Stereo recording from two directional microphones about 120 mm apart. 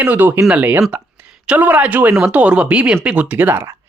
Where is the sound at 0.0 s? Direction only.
15° right (ahead or behind).